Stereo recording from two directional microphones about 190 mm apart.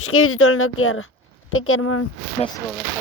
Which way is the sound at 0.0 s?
90° left.